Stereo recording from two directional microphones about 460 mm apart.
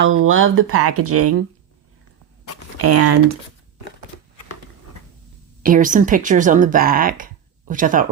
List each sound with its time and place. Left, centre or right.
0.0 s speech: right
2.7 s speech: right
5.6 s speech: centre